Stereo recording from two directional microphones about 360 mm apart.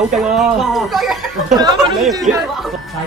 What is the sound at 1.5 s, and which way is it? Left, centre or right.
Speech, centre.